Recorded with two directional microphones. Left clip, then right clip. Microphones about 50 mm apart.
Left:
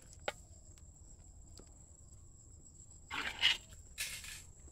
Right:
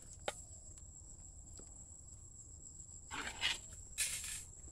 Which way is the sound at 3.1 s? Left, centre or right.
Left.